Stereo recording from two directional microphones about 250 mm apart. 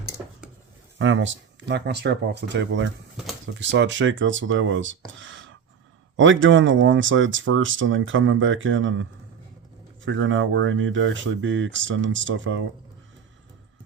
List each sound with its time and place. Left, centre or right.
0.9 s speech: right